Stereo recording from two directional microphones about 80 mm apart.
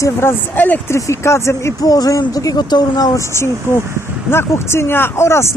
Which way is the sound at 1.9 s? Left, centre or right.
Left.